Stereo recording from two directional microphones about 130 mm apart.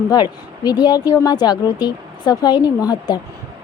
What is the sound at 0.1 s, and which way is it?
A woman's voice, 30° left (ahead or behind).